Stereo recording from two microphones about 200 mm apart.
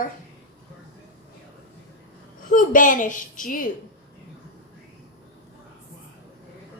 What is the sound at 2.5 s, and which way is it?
A woman's voice, 40° left (ahead or behind).